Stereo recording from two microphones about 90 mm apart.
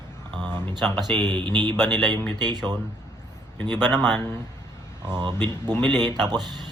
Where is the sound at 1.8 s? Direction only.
55° right (ahead or behind).